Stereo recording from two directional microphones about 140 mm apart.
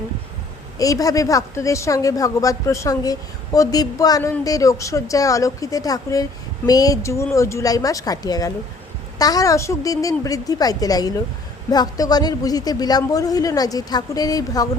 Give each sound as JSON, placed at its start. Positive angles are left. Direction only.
{"t": 0.8, "sound": "a woman's voice", "side_deg": 25}